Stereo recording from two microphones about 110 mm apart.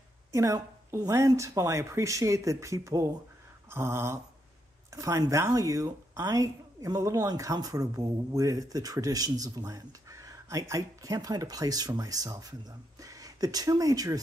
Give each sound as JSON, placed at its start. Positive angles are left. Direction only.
{"t": 0.3, "sound": "a woman's voice", "side_deg": -30}